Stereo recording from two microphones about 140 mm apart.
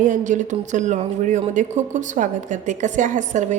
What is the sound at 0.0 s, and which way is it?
A woman's voice, 65° right (ahead or behind).